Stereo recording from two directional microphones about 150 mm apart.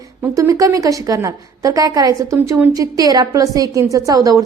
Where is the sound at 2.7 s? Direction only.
25° right (ahead or behind).